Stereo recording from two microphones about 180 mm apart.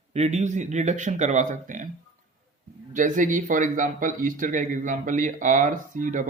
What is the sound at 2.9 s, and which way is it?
Speech, 45° right (ahead or behind).